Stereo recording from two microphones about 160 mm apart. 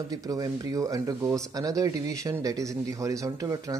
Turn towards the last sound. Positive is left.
turn(degrees=-20)  # may be behind; listen again after turning